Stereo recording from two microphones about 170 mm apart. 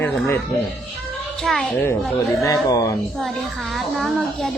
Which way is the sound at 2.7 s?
20° left (ahead or behind).